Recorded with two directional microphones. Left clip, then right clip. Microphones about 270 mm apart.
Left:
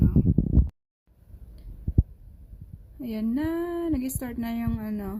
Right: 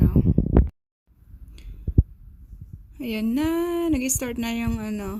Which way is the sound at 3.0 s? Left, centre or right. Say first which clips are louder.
Right 4 dB; centre.